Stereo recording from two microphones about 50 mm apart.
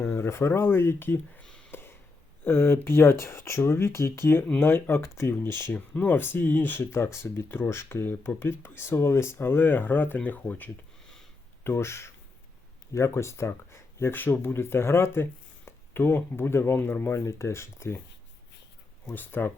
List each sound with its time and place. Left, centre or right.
0.0 s speech: left
1.7 s a sound: left
2.4 s speech: left
6.0 s speech: left
11.6 s speech: left
19.1 s speech: left